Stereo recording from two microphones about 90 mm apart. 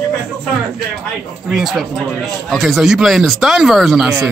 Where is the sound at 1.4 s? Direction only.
5° right (ahead or behind).